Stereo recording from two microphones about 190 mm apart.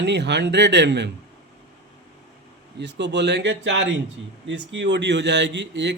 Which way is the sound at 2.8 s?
65° right (ahead or behind).